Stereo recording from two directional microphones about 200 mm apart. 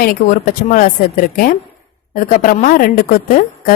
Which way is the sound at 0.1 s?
40° left (ahead or behind).